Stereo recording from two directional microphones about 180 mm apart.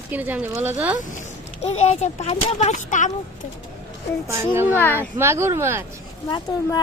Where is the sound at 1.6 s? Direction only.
35° left (ahead or behind).